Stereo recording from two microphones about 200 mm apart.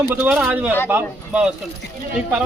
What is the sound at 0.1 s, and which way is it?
A man's voice, 5° right (ahead or behind).